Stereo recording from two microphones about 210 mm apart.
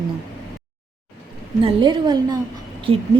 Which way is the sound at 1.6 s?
20° right (ahead or behind).